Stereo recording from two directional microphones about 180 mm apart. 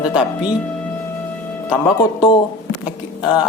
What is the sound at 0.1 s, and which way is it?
Speech, 25° left (ahead or behind).